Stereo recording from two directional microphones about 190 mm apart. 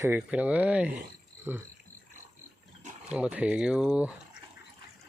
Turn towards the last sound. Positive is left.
turn(degrees=-5)  # may be behind; listen again after turning